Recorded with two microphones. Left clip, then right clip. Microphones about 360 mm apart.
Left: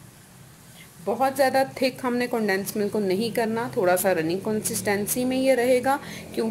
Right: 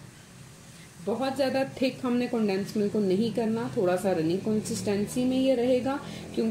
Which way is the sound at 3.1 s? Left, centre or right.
Left.